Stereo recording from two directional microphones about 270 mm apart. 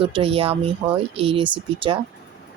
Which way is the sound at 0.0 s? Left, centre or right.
Centre.